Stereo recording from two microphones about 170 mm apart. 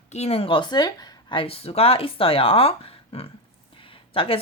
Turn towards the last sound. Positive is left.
turn(degrees=30)  # may be behind; listen again after turning